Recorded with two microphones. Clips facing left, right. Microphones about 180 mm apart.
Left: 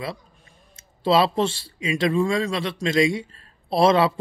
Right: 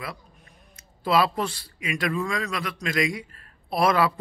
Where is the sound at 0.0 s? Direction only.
25° left (ahead or behind).